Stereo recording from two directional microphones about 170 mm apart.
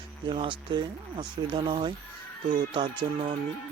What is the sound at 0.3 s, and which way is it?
Speech, 30° right (ahead or behind).